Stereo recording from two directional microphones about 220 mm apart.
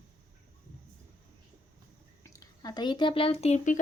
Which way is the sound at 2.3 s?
15° left (ahead or behind).